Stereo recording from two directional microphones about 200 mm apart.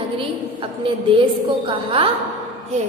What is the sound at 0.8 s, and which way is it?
A woman's voice, 25° right (ahead or behind).